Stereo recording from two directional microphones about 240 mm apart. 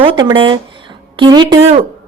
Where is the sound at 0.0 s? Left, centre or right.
Right.